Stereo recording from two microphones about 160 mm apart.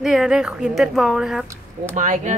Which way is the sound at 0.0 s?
5° right (ahead or behind).